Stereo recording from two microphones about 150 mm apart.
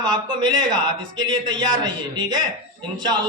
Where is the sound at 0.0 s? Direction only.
30° right (ahead or behind).